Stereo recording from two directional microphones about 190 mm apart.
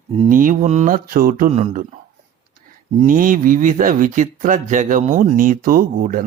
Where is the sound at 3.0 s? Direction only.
45° right (ahead or behind).